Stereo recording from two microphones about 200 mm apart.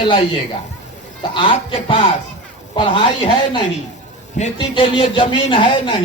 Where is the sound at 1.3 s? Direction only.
25° left (ahead or behind).